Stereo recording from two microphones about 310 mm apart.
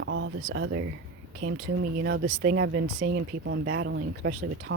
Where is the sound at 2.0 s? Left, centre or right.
Right.